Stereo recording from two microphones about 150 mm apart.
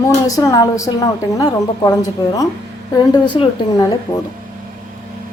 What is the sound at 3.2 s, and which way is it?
Speech, 30° left (ahead or behind).